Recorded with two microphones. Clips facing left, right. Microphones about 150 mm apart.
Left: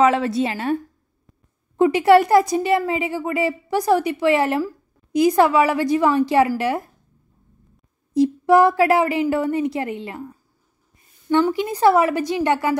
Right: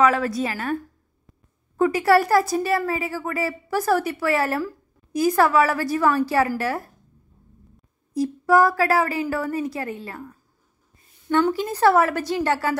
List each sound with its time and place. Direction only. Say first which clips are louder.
0.0 s speech: left 3 dB; 25° left (ahead or behind)
1.8 s speech: left 4 dB; 20° left (ahead or behind)
8.1 s a woman's voice: left 4 dB; 25° left (ahead or behind)